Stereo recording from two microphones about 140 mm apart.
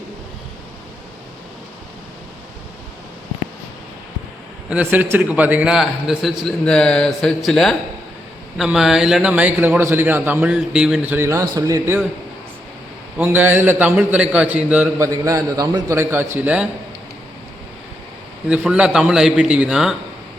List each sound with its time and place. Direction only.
4.7 s a man's voice: 10° right (ahead or behind)
13.1 s a man's voice: 15° right (ahead or behind)
15.0 s a man's voice: 25° right (ahead or behind)
18.4 s a man's voice: 5° right (ahead or behind)